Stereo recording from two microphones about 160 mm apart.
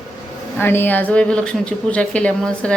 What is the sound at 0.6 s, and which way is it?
Speech, 15° left (ahead or behind).